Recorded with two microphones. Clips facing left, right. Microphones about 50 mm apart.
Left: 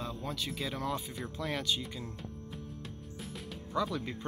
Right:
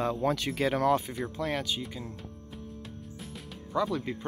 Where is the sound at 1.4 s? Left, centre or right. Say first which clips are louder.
Right 2 dB; right.